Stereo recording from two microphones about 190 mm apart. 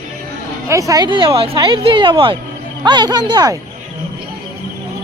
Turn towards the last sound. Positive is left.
turn(degrees=-20)  # may be behind; listen again after turning